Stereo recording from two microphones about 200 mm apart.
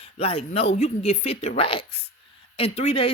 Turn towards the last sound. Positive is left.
turn(degrees=30)  # may be behind; listen again after turning